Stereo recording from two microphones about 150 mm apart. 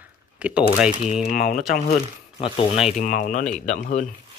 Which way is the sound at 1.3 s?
85° left.